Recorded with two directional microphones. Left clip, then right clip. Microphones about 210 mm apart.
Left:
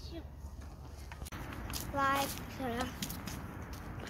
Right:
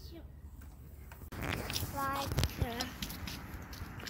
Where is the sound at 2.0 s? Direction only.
35° left (ahead or behind).